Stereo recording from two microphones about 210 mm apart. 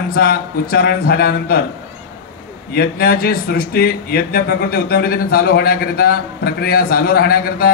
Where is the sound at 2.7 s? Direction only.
45° left (ahead or behind).